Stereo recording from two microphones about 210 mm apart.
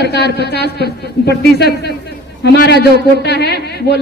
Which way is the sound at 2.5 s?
55° left (ahead or behind).